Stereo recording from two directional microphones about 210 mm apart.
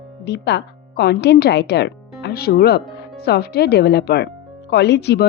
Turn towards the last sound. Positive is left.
turn(degrees=50)  # may be behind; listen again after turning